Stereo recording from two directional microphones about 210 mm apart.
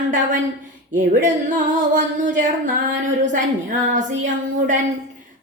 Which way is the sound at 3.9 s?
35° right (ahead or behind).